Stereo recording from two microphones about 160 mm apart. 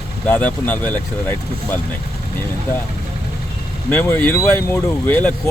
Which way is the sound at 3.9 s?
10° left (ahead or behind).